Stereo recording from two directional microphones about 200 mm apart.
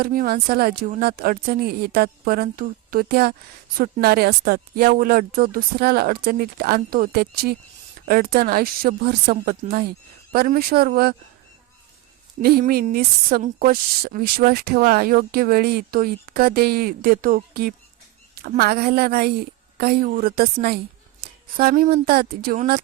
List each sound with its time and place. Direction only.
0.0 s a woman's voice: 45° right (ahead or behind)
12.4 s a woman's voice: 50° right (ahead or behind)